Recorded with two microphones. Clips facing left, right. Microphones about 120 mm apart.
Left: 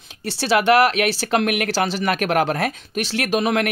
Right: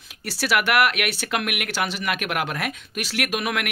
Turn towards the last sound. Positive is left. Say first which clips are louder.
# left 6 dB
turn(degrees=30)  # may be behind; listen again after turning